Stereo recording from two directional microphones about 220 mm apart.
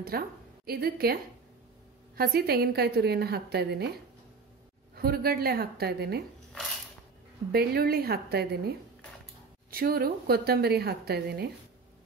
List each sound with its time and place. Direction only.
0.1 s a woman's voice: 45° right (ahead or behind)
4.9 s a woman's voice: 45° right (ahead or behind)
7.5 s a woman's voice: 45° right (ahead or behind)